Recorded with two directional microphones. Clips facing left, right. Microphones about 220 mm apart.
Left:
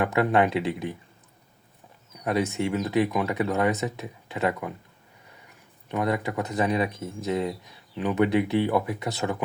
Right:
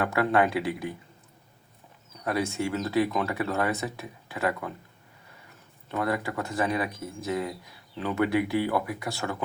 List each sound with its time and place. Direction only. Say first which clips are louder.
0.0 s speech: left 2 dB; 20° left (ahead or behind)
2.2 s speech: left 3 dB; 20° left (ahead or behind)
5.9 s speech: left 2 dB; 20° left (ahead or behind)